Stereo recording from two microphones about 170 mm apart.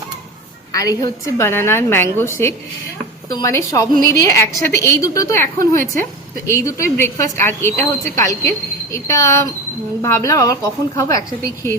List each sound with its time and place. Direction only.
0.7 s a woman's voice: 20° left (ahead or behind)
6.5 s a woman's voice: 20° left (ahead or behind)